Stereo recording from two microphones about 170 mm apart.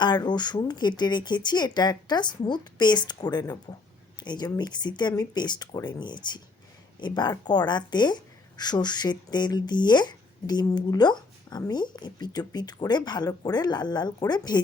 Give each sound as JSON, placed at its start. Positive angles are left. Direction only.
{"t": 0.0, "sound": "speech", "side_deg": 25}